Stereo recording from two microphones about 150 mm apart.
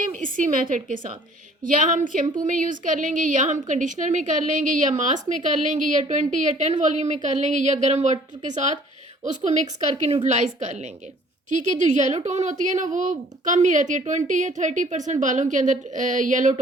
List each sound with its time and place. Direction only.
0.0 s a woman's voice: 60° right (ahead or behind)